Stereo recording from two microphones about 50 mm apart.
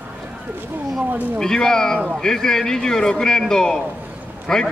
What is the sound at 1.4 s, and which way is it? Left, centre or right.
A man's voice, centre.